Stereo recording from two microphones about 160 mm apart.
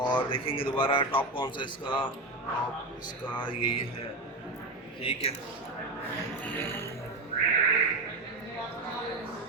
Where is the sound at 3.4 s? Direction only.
30° left (ahead or behind).